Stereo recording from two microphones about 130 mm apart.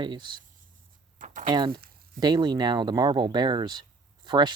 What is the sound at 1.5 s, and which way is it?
Speech, 35° right (ahead or behind).